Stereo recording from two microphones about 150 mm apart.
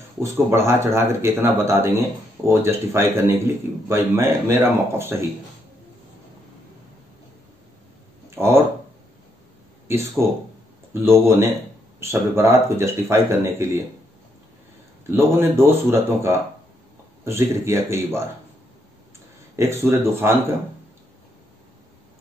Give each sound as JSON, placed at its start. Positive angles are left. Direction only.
{"t": 0.2, "sound": "a man's voice", "side_deg": -20}
{"t": 8.4, "sound": "speech", "side_deg": -15}
{"t": 9.8, "sound": "a man's voice", "side_deg": -15}
{"t": 15.0, "sound": "a man's voice", "side_deg": -15}
{"t": 19.5, "sound": "a man's voice", "side_deg": -15}